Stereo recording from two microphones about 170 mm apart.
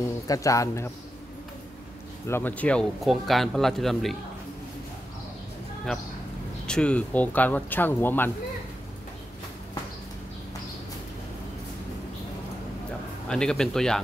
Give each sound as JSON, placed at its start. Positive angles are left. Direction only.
{"t": 0.3, "sound": "a man's voice", "side_deg": 20}
{"t": 2.2, "sound": "speech", "side_deg": 10}
{"t": 6.7, "sound": "speech", "side_deg": 5}
{"t": 13.3, "sound": "speech", "side_deg": 5}